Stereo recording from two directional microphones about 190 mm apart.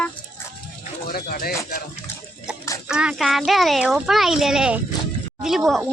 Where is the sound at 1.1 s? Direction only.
50° left (ahead or behind).